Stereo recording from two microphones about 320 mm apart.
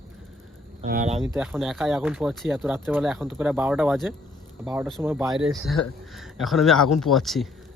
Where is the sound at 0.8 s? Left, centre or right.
Right.